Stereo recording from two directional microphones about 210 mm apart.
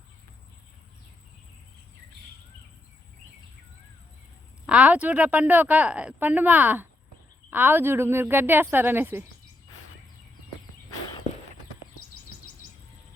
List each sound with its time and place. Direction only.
4.6 s a woman's voice: 5° right (ahead or behind)